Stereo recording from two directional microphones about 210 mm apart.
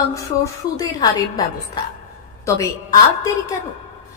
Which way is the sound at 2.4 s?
15° left (ahead or behind).